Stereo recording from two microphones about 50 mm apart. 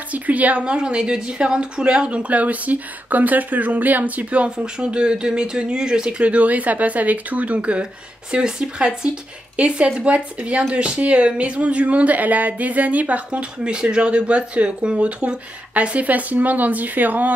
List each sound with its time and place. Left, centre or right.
0.1 s speech: right
4.5 s speech: centre; by 17.3 s right